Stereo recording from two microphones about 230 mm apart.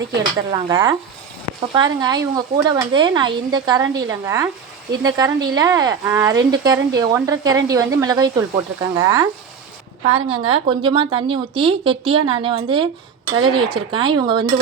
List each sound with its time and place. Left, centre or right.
0.2 s a woman's voice: centre